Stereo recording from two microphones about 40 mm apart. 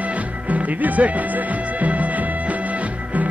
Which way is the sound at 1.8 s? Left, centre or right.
Right.